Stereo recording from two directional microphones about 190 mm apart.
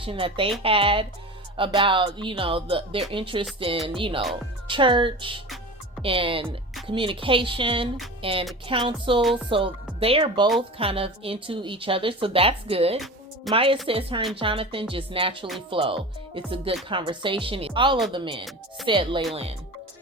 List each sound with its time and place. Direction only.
0.0 s speech: 30° right (ahead or behind)
9.2 s speech: centre (ahead or behind)
9.5 s speech: 30° right (ahead or behind)